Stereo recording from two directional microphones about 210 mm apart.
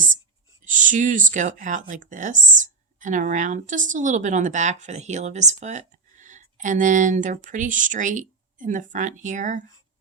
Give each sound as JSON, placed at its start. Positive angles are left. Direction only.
{"t": 0.6, "sound": "speech", "side_deg": -40}